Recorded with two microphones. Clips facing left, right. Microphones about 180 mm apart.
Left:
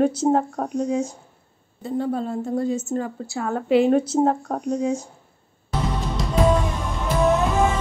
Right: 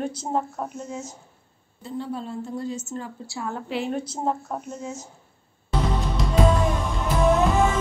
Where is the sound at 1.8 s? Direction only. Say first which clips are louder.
Left 7 dB; 50° left (ahead or behind); by 4.3 s 70° left (ahead or behind).